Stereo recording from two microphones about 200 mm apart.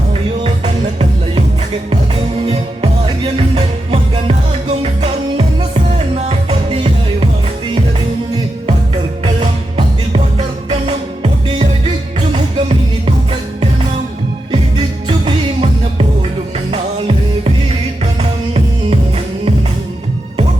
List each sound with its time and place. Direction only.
0.1 s music: 30° right (ahead or behind)
3.3 s music: 30° right (ahead or behind)
9.2 s music: 25° right (ahead or behind)
15.0 s music: 25° right (ahead or behind)